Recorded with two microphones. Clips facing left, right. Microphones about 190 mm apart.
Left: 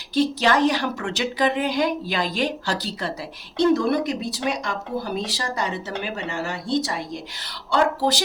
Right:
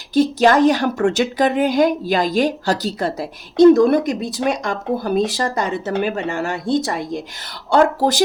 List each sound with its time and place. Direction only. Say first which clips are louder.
0.1 s a woman's voice: right 6 dB; 45° right (ahead or behind)